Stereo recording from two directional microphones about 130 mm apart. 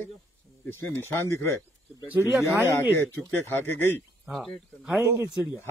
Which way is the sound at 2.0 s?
15° right (ahead or behind).